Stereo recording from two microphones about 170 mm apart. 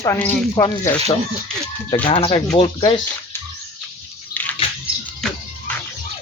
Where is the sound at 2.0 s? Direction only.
30° left (ahead or behind).